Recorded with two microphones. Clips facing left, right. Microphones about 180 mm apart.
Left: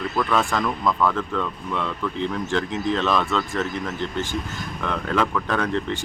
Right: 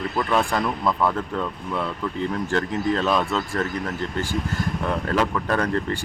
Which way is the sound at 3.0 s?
10° right (ahead or behind).